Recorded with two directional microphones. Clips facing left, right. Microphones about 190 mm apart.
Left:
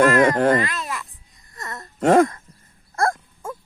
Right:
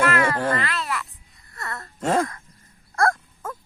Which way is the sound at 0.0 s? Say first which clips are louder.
Left 6 dB; 50° left (ahead or behind).